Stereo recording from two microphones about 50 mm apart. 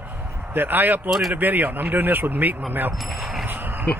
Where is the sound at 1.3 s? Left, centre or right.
Right.